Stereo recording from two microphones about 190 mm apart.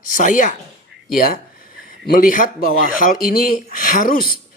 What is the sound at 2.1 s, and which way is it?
A man's voice, 45° left (ahead or behind).